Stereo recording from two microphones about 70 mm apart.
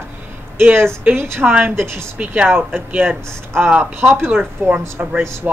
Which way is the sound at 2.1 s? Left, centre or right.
Centre.